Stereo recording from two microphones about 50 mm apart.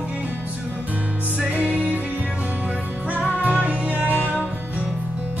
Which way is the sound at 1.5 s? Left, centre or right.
Right.